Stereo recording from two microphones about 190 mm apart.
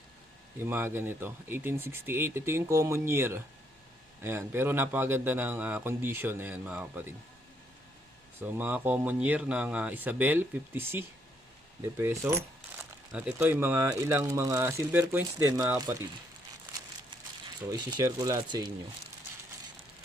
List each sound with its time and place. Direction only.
0.6 s speech: 10° right (ahead or behind)
8.4 s speech: 10° right (ahead or behind)
17.7 s speech: 20° right (ahead or behind)